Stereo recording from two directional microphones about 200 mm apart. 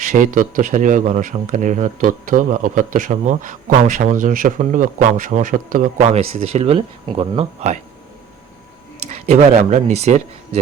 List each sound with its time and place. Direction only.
0.0 s speech: 40° right (ahead or behind)
9.0 s speech: 35° right (ahead or behind)